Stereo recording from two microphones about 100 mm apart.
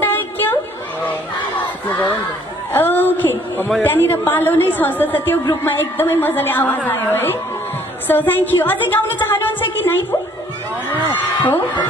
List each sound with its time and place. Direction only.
0.0 s a sound: 20° left (ahead or behind)
2.7 s a woman's voice: 20° left (ahead or behind)
11.4 s a woman's voice: 15° left (ahead or behind)